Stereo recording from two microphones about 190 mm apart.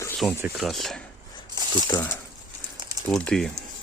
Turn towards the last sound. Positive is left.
turn(degrees=5)  # may be behind; listen again after turning